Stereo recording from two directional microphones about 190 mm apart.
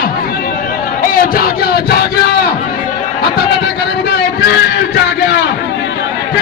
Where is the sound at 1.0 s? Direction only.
50° left (ahead or behind).